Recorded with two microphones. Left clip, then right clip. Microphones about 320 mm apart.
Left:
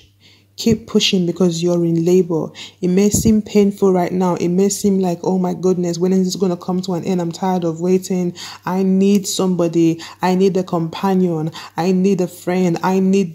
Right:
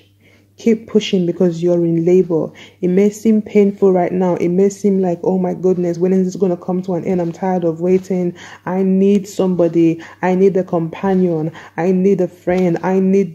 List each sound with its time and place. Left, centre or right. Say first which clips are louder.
0.7 s a man's voice: right 1 dB; left